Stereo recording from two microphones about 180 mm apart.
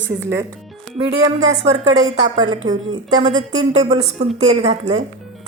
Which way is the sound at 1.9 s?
40° right (ahead or behind).